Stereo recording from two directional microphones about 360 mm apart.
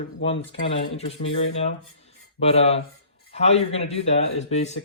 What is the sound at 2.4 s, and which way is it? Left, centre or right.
Speech, centre.